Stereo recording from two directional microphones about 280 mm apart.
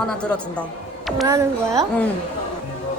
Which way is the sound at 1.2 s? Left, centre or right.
Centre.